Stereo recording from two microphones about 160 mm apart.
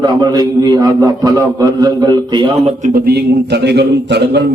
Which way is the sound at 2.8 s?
70° right (ahead or behind).